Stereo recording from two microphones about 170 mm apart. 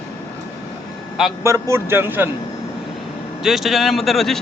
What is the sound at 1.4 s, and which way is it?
Speech, 15° right (ahead or behind).